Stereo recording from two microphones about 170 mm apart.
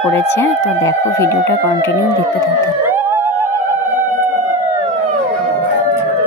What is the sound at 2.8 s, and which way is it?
Theremin, 15° right (ahead or behind).